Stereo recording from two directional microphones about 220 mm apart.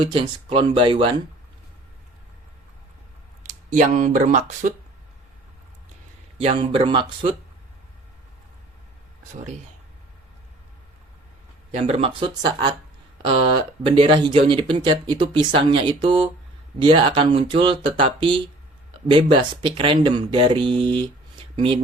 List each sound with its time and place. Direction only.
0.0 s speech: 20° right (ahead or behind)
3.7 s speech: 35° right (ahead or behind)
6.4 s speech: 25° right (ahead or behind)
11.7 s speech: 25° right (ahead or behind)